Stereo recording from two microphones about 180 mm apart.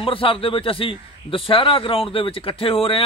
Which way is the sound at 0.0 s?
30° left (ahead or behind).